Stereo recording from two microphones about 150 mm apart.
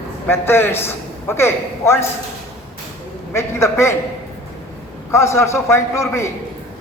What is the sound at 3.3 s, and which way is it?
Speech, 20° left (ahead or behind).